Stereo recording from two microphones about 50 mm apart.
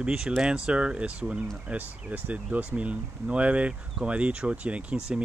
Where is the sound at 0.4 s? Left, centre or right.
Centre.